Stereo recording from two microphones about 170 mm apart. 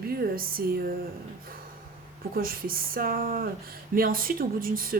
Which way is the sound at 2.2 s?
60° right (ahead or behind).